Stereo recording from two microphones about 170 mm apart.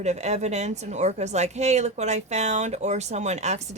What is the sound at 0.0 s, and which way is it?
A woman's voice, 40° right (ahead or behind).